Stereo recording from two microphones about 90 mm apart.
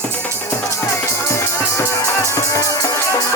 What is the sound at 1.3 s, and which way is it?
Music, 30° left (ahead or behind).